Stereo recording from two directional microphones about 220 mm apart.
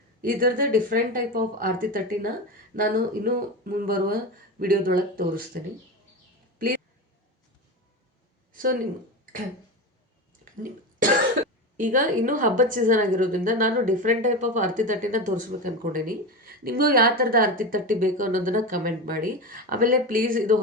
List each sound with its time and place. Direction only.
0.2 s a woman's voice: 40° right (ahead or behind)
8.5 s speech: 40° right (ahead or behind)
10.4 s a sound: 40° right (ahead or behind)
11.8 s a woman's voice: 35° right (ahead or behind)